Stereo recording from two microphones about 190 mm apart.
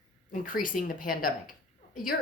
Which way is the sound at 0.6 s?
45° left (ahead or behind).